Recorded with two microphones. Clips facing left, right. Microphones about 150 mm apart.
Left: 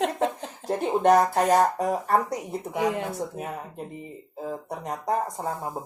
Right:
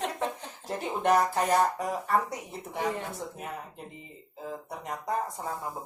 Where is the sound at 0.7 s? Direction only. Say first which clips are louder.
Left 6 dB; 45° left (ahead or behind).